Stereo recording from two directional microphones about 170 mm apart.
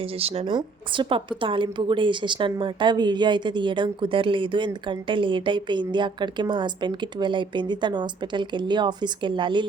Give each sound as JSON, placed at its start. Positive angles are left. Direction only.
{"t": 0.2, "sound": "a woman's voice", "side_deg": -35}